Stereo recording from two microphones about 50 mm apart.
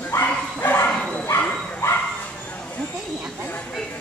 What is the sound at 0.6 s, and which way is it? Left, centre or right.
Bow-wow, left.